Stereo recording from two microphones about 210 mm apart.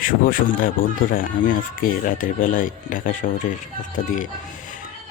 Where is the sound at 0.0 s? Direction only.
40° left (ahead or behind).